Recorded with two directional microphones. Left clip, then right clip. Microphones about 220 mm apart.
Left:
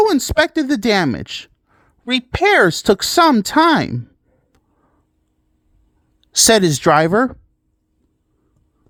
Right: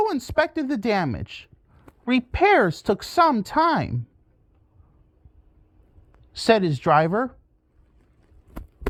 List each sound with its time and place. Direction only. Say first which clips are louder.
0.0 s speech: left 8 dB; 40° left (ahead or behind)
6.3 s speech: left 7 dB; 45° left (ahead or behind)